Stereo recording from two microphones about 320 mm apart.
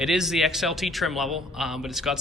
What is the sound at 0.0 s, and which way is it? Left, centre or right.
A man's voice, centre.